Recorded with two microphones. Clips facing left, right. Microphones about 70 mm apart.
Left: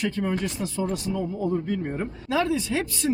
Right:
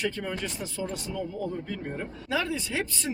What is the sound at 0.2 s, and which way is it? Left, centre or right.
Speech, centre.